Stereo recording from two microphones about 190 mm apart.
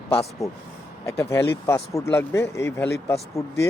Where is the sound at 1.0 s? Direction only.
15° left (ahead or behind).